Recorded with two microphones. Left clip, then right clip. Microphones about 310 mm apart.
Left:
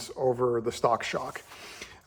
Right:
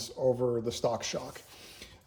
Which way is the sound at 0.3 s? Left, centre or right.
Centre.